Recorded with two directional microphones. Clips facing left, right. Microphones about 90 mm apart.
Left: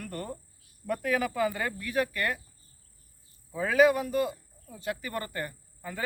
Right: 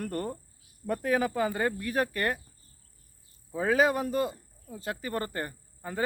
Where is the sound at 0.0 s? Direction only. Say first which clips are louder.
Right 4 dB; 40° right (ahead or behind).